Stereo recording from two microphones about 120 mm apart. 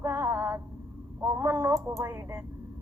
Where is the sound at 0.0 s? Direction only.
20° right (ahead or behind).